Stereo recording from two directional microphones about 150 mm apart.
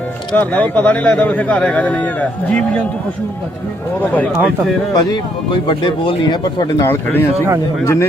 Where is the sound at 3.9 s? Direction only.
10° left (ahead or behind).